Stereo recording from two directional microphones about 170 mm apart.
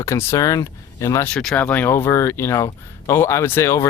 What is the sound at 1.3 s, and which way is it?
Speech, 5° left (ahead or behind).